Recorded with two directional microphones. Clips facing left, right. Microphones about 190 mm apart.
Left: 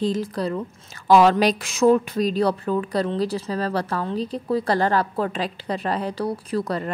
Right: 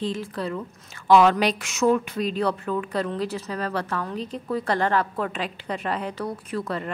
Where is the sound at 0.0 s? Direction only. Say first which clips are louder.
Left 5 dB; 40° left (ahead or behind).